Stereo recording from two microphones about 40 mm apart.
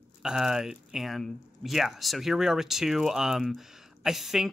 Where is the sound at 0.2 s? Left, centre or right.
Centre.